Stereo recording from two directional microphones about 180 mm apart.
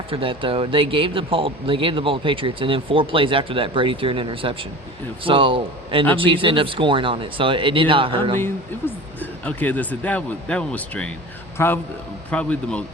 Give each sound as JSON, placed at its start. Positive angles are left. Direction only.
{"t": 0.1, "sound": "speech", "side_deg": -30}
{"t": 9.4, "sound": "a man's voice", "side_deg": 10}